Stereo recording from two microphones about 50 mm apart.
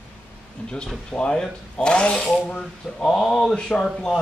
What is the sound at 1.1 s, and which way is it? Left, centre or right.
Speech, left.